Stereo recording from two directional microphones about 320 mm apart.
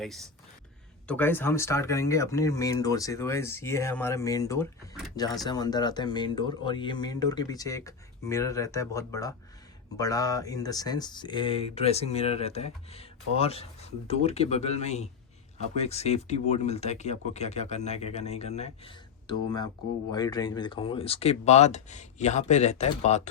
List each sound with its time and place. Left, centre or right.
1.0 s speech: centre